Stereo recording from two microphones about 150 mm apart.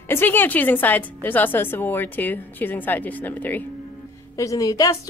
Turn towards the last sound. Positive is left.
turn(degrees=25)  # may be behind; listen again after turning